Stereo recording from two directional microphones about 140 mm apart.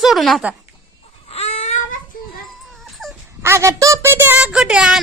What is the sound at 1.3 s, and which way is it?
Baby cry, 45° left (ahead or behind).